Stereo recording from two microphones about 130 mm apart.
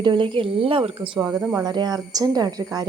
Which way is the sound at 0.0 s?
40° right (ahead or behind).